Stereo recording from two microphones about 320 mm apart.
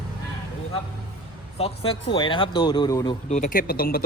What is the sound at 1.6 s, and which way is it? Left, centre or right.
Speech, centre.